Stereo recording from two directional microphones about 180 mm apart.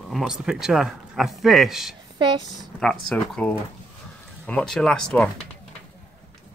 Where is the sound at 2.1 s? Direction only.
25° right (ahead or behind).